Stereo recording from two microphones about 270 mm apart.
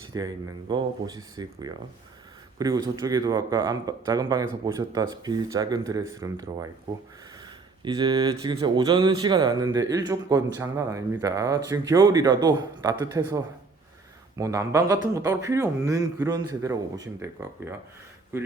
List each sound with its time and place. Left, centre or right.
0.1 s speech: centre